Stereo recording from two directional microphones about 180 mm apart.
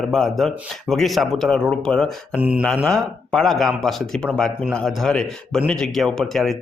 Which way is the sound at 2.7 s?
Centre (ahead or behind).